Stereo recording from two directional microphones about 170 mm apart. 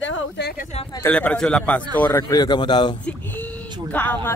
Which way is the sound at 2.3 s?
25° left (ahead or behind).